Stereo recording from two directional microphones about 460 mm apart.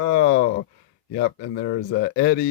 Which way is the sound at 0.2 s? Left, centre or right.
Centre.